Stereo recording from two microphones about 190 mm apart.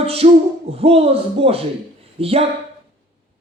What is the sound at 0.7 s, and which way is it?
A man's voice, 30° right (ahead or behind).